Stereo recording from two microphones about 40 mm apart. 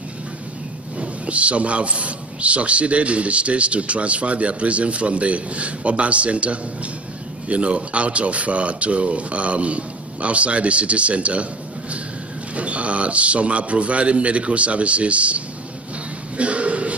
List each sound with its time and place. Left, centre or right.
0.9 s a man's voice: right
12.5 s a man's voice: right
16.3 s a sound: right